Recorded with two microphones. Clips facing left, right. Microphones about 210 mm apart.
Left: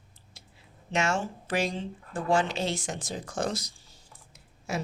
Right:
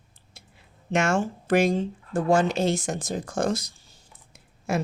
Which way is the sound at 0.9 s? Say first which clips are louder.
Right 5 dB; 50° right (ahead or behind).